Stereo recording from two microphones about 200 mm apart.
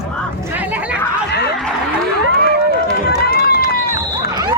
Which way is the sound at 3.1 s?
50° left (ahead or behind).